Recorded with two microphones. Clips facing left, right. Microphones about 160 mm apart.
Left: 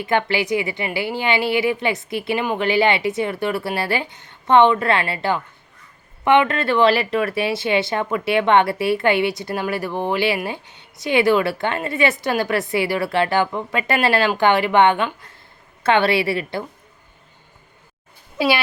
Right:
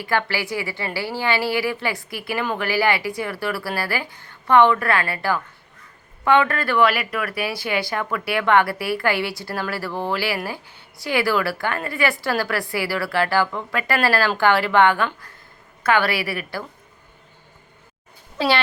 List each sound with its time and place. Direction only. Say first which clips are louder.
0.0 s speech: left 3 dB; 20° left (ahead or behind)
18.3 s speech: left 1 dB; 10° left (ahead or behind)